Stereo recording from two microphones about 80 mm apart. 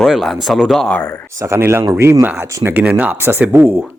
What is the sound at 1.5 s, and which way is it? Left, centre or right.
Speech, right.